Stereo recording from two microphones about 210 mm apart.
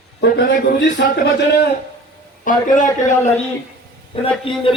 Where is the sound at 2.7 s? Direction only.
35° left (ahead or behind).